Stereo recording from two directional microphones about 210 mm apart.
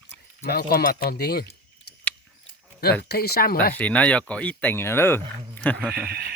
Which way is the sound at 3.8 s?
5° left (ahead or behind).